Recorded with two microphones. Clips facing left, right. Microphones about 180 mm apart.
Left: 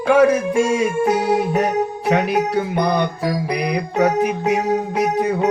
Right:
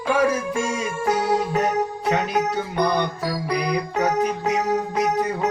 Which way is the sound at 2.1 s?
65° left (ahead or behind).